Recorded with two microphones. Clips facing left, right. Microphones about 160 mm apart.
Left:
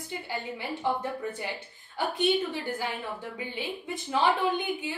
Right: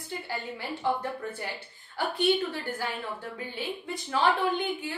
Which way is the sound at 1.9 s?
15° left (ahead or behind).